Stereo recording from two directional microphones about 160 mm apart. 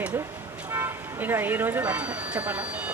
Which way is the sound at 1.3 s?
15° right (ahead or behind).